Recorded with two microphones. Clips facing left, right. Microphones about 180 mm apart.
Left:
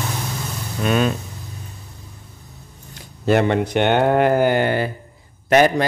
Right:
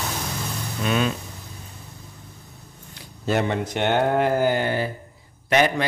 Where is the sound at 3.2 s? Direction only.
65° left (ahead or behind).